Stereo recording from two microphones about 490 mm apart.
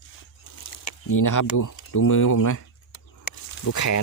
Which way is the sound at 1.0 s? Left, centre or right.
Left.